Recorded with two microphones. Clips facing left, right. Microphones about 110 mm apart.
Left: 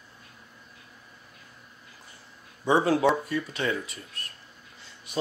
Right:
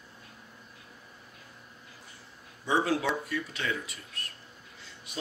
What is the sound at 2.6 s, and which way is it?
Speech, 35° left (ahead or behind).